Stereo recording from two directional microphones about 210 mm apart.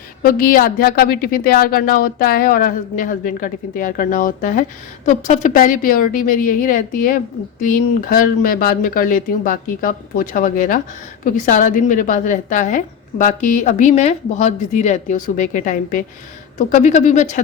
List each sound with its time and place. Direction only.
0.2 s a woman's voice: 45° left (ahead or behind)